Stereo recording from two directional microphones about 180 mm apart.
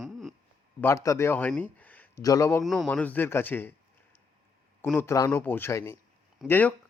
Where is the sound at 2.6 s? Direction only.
Centre (ahead or behind).